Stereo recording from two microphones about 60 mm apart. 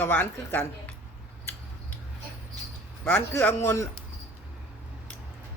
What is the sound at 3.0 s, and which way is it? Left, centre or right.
Speech, left.